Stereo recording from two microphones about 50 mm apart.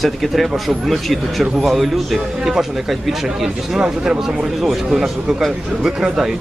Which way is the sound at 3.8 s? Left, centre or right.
Centre.